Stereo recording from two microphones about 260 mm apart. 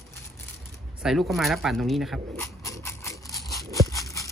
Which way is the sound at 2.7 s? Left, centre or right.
Centre.